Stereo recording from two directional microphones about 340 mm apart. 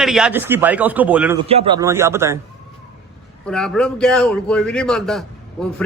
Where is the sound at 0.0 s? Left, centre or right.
Centre.